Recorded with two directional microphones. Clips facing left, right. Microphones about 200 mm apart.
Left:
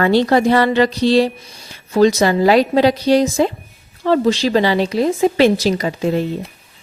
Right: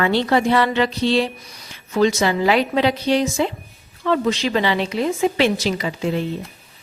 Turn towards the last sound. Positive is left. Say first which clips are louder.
# left 4 dB
turn(degrees=45)  # may be behind; listen again after turning